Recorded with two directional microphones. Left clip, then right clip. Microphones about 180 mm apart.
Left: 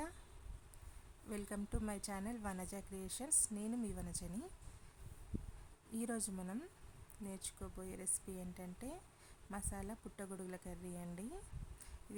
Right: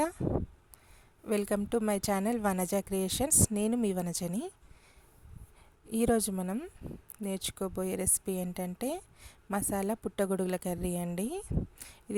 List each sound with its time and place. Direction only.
1.3 s a woman's voice: 55° right (ahead or behind)
5.9 s a woman's voice: 55° right (ahead or behind)